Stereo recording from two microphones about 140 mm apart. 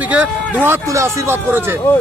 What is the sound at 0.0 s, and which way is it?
Speech, 10° right (ahead or behind).